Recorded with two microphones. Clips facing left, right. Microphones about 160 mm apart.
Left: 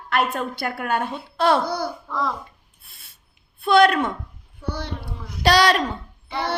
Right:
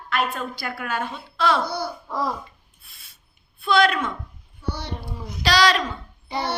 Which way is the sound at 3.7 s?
55° left (ahead or behind).